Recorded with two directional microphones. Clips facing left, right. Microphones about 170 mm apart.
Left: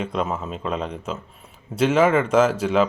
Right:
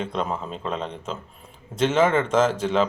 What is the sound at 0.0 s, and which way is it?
A man's voice, 5° left (ahead or behind).